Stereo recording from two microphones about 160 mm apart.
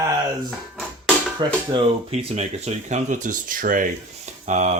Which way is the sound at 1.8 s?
45° right (ahead or behind).